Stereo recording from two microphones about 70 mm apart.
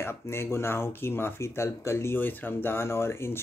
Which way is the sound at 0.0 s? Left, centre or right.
Left.